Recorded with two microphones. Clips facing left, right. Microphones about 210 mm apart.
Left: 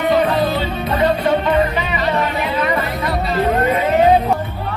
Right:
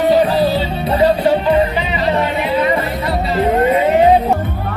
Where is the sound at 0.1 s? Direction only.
35° right (ahead or behind).